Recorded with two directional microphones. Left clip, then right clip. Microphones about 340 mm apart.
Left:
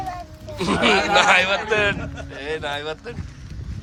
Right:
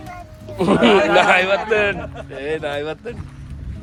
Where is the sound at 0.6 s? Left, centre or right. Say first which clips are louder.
Right 4 dB; centre.